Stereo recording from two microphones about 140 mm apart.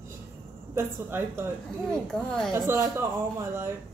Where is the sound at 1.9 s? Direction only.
5° left (ahead or behind).